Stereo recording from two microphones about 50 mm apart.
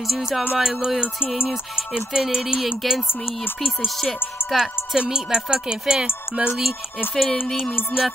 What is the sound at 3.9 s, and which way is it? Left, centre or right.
Speech, centre.